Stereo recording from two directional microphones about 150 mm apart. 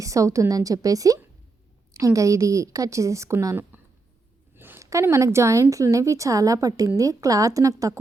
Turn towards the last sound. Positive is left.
turn(degrees=-20)  # may be behind; listen again after turning